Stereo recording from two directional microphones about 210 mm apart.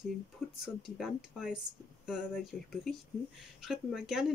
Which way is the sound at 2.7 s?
Centre (ahead or behind).